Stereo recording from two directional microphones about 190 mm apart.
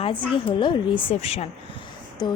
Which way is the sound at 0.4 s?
25° left (ahead or behind).